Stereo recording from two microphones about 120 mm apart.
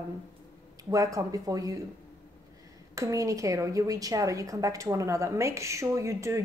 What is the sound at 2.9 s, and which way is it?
A woman's voice, 25° right (ahead or behind).